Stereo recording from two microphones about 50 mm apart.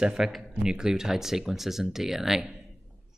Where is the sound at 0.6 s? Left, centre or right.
Centre.